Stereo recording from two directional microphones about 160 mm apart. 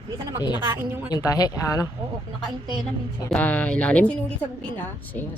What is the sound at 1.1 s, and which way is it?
Speech, 20° left (ahead or behind).